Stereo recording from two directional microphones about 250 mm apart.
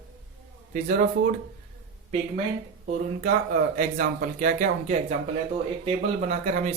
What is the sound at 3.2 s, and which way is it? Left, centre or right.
Speech, right.